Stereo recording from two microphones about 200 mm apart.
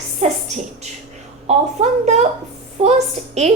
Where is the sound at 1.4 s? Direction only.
35° right (ahead or behind).